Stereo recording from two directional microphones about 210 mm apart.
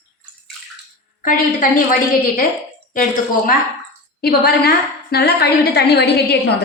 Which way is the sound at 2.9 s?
40° left (ahead or behind).